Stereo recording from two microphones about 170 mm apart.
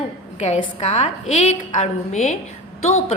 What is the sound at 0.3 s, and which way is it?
A woman's voice, 40° left (ahead or behind).